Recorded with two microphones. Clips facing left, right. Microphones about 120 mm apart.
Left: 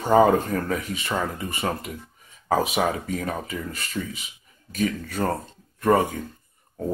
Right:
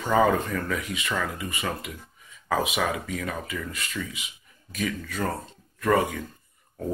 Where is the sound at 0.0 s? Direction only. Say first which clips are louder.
Left 4 dB; 35° left (ahead or behind).